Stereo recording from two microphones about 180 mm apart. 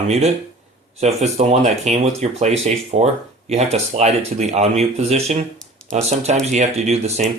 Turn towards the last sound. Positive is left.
turn(degrees=-35)  # may be behind; listen again after turning